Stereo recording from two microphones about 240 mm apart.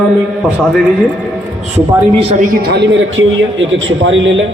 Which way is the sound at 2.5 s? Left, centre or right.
Right.